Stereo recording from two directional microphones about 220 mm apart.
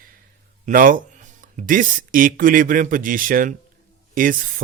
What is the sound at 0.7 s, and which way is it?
Speech, 40° right (ahead or behind).